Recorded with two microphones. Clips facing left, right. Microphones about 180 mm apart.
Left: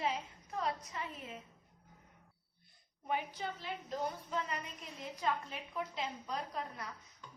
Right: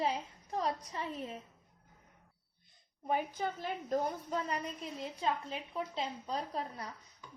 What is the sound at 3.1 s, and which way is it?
A woman's voice, 45° right (ahead or behind).